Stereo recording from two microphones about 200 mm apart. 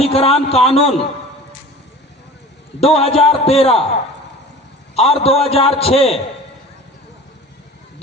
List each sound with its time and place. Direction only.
0.0 s speech: 30° left (ahead or behind)
2.8 s a man's voice: 30° left (ahead or behind)
4.9 s a man's voice: 30° left (ahead or behind)